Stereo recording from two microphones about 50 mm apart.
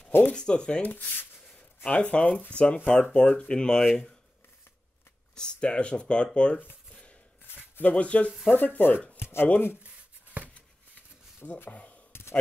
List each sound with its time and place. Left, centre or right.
0.2 s speech: centre
0.8 s speech: left
1.9 s speech: left
5.3 s speech: centre
7.9 s speech: left
8.3 s speech: centre
8.5 s speech: left
9.1 s chopping: left
10.4 s a sound: right
11.7 s a sound: left
12.1 s sigh: left